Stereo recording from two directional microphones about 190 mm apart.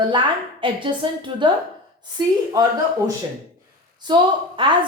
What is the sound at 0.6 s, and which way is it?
Speech, 25° right (ahead or behind).